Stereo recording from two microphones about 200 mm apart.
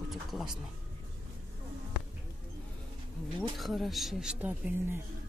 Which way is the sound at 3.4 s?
Centre (ahead or behind).